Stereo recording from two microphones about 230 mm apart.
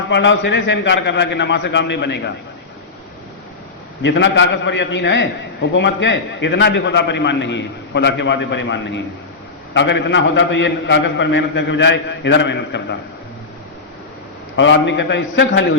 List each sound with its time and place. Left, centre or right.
0.1 s a man's voice: left
4.0 s a man's voice: left
14.5 s a man's voice: left